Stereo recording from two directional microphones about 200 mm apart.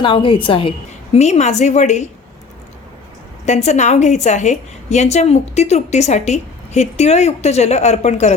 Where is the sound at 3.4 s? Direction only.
35° left (ahead or behind).